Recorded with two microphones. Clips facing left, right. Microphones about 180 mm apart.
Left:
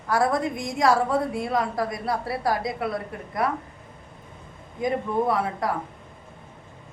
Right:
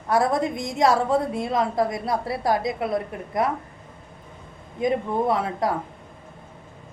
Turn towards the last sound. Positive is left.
turn(degrees=-25)  # may be behind; listen again after turning